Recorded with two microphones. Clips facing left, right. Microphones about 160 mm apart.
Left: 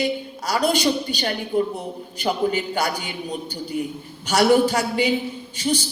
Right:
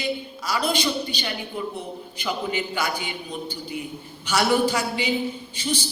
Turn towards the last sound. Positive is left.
turn(degrees=45)  # may be behind; listen again after turning